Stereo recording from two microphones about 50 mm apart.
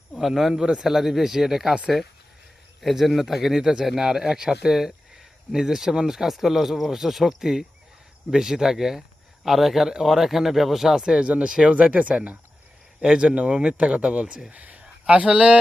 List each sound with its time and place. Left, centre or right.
0.2 s speech: centre
0.5 s speech: centre
0.9 s speech: centre
2.8 s speech: centre
11.0 s a man's voice: centre